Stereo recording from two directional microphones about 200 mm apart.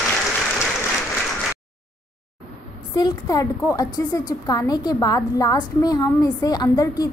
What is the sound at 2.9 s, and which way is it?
A woman's voice, 20° left (ahead or behind).